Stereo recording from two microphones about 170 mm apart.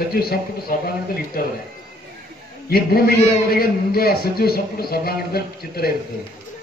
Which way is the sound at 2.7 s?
65° left (ahead or behind).